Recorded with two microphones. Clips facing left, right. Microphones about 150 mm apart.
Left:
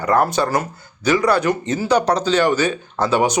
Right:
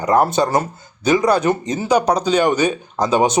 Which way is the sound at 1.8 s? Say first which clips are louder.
Right 1 dB; 10° right (ahead or behind).